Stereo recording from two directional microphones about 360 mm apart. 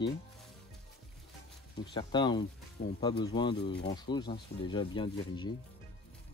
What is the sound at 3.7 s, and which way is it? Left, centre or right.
Speech, left.